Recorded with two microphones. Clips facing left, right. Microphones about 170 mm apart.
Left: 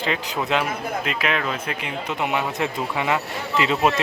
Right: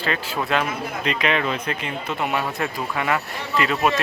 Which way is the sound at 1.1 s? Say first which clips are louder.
Right 4 dB; 5° left (ahead or behind).